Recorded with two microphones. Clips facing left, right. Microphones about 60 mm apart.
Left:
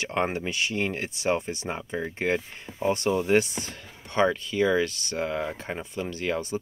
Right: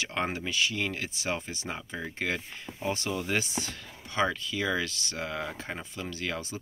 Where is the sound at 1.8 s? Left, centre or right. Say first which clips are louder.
Left 5 dB; centre.